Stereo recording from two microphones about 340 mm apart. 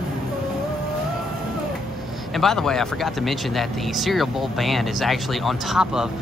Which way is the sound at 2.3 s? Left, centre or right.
Centre.